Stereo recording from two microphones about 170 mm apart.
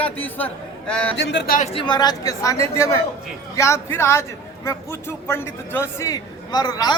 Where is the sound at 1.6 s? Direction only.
35° left (ahead or behind).